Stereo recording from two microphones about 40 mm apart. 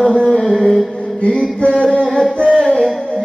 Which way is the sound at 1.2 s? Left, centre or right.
Left.